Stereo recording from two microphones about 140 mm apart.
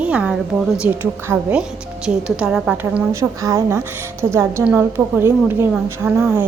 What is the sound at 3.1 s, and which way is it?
A woman's voice, 20° right (ahead or behind).